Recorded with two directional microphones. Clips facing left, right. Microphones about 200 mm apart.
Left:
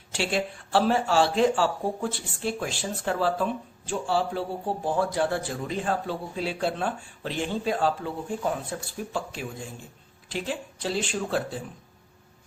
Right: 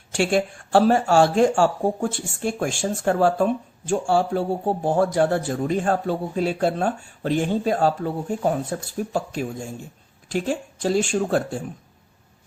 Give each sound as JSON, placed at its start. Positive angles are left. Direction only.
{"t": 0.1, "sound": "speech", "side_deg": -45}